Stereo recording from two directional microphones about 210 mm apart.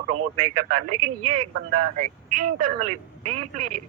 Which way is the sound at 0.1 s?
90° right.